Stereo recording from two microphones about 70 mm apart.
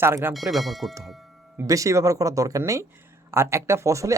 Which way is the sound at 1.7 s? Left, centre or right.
Right.